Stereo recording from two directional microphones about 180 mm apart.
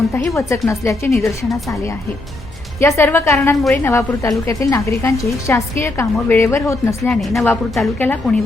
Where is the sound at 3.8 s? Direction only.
15° left (ahead or behind).